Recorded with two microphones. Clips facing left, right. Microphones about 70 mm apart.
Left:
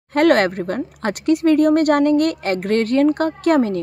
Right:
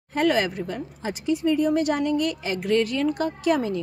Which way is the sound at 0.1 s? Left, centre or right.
Left.